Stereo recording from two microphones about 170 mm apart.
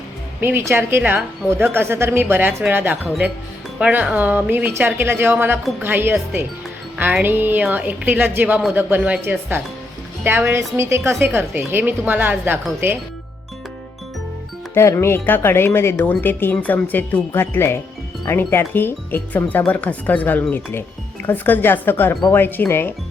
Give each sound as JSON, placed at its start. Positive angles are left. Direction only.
{"t": 0.3, "sound": "a woman's voice", "side_deg": -15}
{"t": 14.8, "sound": "speech", "side_deg": 15}